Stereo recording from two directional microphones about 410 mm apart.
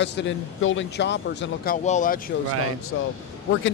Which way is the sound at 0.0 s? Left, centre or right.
Left.